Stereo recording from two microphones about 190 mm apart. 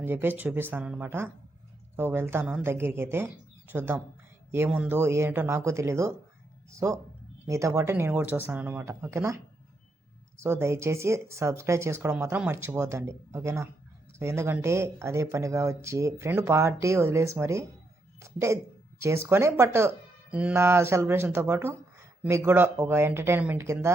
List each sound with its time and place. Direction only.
0.0 s speech: 10° right (ahead or behind)
18.2 s a sound: 15° right (ahead or behind)
19.0 s speech: 15° right (ahead or behind)